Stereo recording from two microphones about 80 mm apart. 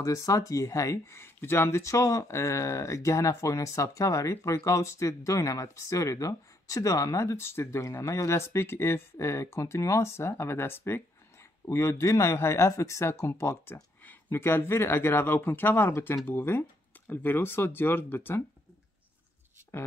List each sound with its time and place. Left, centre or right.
0.0 s speech: left